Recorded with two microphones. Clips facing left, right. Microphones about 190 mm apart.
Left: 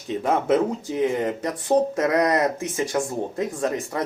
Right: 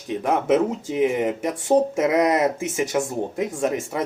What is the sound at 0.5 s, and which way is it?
Speech, 15° right (ahead or behind).